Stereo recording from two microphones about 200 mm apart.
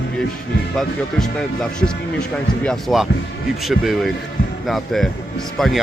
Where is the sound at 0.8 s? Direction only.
5° left (ahead or behind).